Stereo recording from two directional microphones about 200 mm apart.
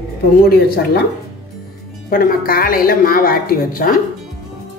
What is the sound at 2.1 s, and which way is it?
Speech, 45° left (ahead or behind).